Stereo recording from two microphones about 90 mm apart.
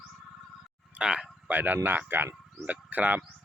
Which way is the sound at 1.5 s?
20° right (ahead or behind).